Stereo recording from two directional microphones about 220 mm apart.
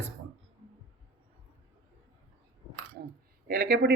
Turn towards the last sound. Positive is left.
turn(degrees=-45)  # may be behind; listen again after turning